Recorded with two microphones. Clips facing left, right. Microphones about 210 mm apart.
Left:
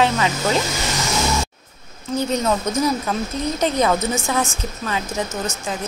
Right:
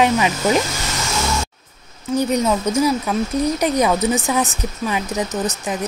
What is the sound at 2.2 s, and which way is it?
Speech, 15° right (ahead or behind).